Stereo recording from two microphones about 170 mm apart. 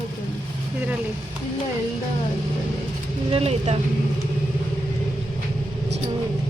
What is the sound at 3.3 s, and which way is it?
Speech, 35° right (ahead or behind).